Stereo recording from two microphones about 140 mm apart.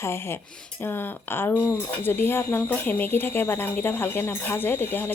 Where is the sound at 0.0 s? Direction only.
20° left (ahead or behind).